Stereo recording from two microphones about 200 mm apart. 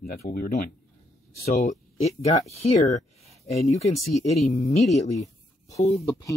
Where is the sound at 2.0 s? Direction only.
30° left (ahead or behind).